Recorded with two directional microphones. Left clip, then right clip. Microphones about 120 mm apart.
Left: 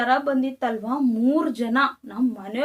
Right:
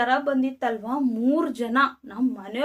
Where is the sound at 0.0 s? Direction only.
25° right (ahead or behind).